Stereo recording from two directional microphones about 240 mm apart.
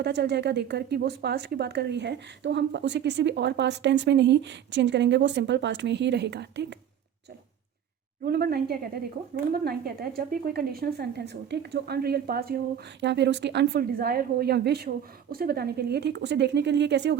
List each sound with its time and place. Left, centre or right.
0.0 s speech: right
8.2 s a woman's voice: right